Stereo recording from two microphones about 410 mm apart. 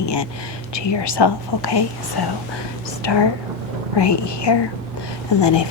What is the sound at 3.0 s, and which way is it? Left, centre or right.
A woman's voice, left.